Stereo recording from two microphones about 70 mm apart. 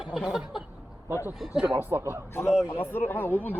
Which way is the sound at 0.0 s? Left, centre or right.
Centre.